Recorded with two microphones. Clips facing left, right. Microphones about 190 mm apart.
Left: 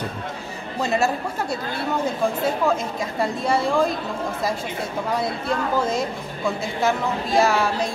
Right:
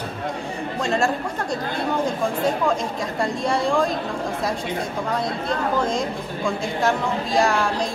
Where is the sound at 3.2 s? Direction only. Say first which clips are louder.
Left 1 dB; 5° left (ahead or behind).